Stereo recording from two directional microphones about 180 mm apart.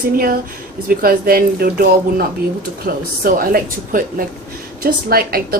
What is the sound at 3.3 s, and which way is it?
A woman's voice, 55° right (ahead or behind).